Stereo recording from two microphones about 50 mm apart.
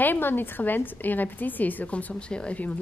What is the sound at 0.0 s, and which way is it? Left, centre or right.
Speech, left.